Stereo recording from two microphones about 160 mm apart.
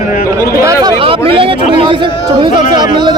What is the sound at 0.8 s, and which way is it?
A man's voice, 35° right (ahead or behind).